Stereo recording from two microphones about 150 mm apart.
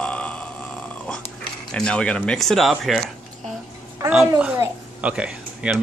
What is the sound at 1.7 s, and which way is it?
Speech, 5° left (ahead or behind).